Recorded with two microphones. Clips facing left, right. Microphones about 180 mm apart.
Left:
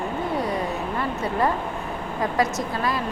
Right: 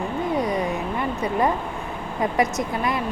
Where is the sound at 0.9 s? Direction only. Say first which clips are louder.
Right 1 dB; 15° right (ahead or behind).